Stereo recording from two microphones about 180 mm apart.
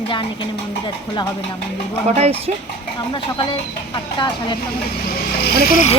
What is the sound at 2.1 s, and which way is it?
Speech, 35° right (ahead or behind).